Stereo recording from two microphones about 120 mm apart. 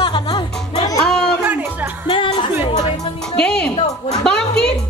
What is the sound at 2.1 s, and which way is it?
Music, 45° left (ahead or behind).